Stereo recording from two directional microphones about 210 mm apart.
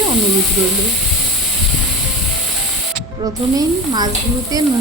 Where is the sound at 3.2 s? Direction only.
15° right (ahead or behind).